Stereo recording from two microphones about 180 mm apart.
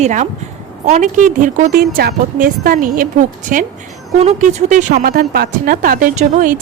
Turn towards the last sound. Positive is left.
turn(degrees=-45)  # may be behind; listen again after turning